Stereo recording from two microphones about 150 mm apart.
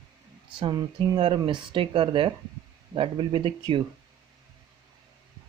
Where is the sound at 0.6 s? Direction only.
30° right (ahead or behind).